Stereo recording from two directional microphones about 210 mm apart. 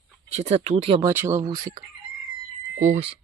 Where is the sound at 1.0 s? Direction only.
15° right (ahead or behind).